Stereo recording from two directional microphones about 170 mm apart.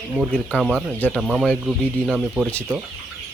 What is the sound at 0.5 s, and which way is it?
Speech, 10° left (ahead or behind).